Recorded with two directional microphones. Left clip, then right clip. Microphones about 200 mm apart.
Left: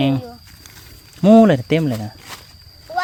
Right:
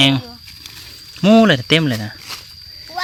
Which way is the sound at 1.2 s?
10° left (ahead or behind).